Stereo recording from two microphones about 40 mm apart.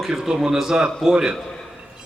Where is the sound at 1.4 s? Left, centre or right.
Centre.